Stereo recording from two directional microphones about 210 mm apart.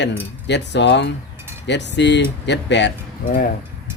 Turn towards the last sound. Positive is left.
turn(degrees=45)  # may be behind; listen again after turning